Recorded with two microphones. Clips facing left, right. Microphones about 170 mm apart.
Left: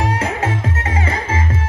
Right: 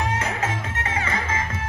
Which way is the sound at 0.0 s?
30° left (ahead or behind).